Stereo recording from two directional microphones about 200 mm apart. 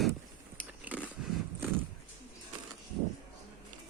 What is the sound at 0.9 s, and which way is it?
Biting, 10° right (ahead or behind).